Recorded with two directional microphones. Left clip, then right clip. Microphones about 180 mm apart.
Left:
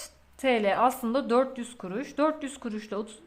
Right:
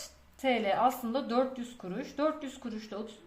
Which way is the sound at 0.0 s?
35° left (ahead or behind).